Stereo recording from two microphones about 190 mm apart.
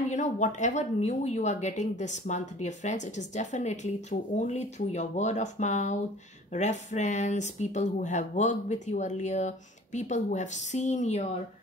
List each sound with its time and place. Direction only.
0.1 s speech: 40° left (ahead or behind)